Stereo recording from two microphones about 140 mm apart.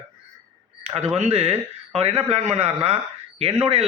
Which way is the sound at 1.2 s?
45° right (ahead or behind).